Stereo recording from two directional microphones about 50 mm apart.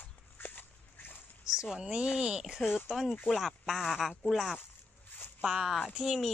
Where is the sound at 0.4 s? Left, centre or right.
Left.